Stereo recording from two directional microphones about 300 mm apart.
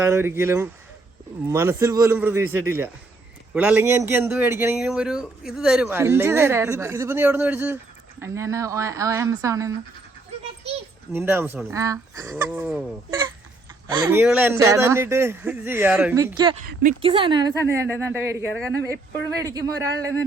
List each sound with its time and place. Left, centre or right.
0.0 s a man's voice: centre
11.1 s a man's voice: centre
16.6 s a man's voice: right